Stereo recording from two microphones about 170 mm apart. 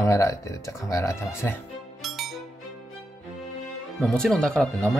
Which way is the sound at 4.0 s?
5° left (ahead or behind).